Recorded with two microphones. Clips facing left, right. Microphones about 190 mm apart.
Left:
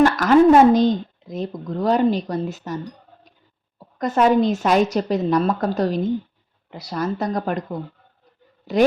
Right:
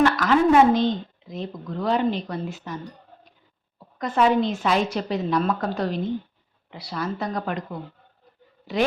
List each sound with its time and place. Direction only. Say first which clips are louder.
0.0 s speech: left 5 dB; 45° left (ahead or behind)
3.9 s a woman's voice: left 3 dB; 45° left (ahead or behind)